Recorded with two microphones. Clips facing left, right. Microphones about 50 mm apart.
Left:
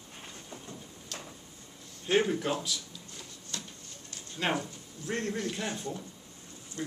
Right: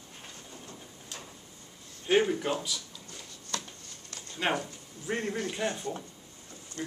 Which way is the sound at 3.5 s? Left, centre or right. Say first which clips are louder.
Right 5 dB; right.